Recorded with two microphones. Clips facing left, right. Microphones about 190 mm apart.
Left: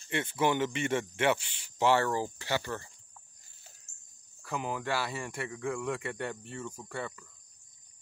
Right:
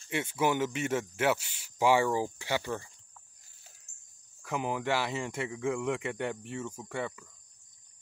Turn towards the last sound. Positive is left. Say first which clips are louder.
# right 3 dB
turn(degrees=-10)  # may be behind; listen again after turning